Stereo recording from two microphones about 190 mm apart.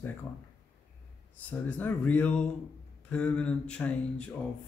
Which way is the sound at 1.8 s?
10° left (ahead or behind).